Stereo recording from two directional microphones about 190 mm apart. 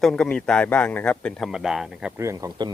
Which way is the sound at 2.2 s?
15° right (ahead or behind).